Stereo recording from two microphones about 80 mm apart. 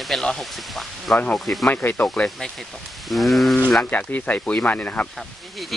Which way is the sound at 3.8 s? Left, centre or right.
Centre.